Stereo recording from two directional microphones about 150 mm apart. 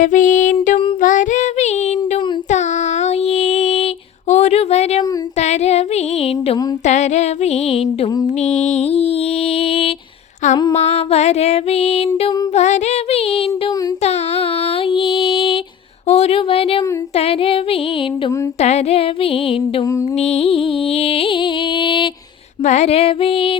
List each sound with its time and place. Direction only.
0.0 s music: 60° left (ahead or behind)
1.0 s child singing: 60° left (ahead or behind)
2.0 s mantra: 50° left (ahead or behind)
4.3 s female singing: 50° left (ahead or behind)
6.8 s music: 50° left (ahead or behind)
12.5 s child singing: 50° left (ahead or behind)
16.0 s a sound: 45° left (ahead or behind)
17.2 s music: 40° left (ahead or behind)
19.8 s a sound: 20° left (ahead or behind)
20.1 s music: 45° left (ahead or behind)
22.6 s music: 50° left (ahead or behind)